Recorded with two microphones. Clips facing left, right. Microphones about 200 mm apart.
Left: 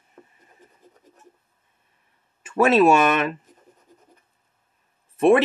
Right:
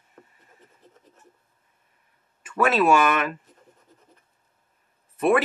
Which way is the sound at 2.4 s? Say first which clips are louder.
Left 4 dB; 25° left (ahead or behind).